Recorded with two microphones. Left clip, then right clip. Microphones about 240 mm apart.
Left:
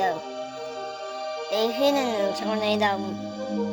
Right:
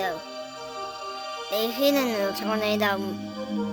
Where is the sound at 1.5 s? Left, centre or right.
Centre.